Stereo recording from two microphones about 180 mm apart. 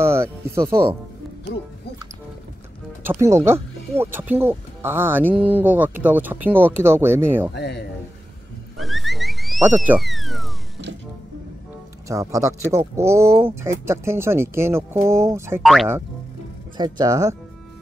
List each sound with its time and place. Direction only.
0.0 s speech: 15° right (ahead or behind)
3.0 s speech: 15° right (ahead or behind)
7.5 s speech: 70° left (ahead or behind)
8.8 s frog: centre (ahead or behind)
12.1 s speech: 15° right (ahead or behind)
15.6 s speech: centre (ahead or behind)
16.7 s speech: 25° right (ahead or behind)